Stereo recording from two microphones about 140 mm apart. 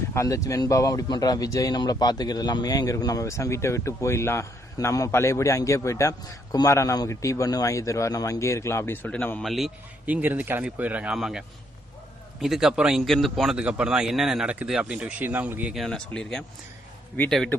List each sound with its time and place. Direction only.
0.1 s speech: 20° left (ahead or behind)
9.4 s a man's voice: centre (ahead or behind)
10.1 s a man's voice: 10° right (ahead or behind)
15.7 s a man's voice: centre (ahead or behind)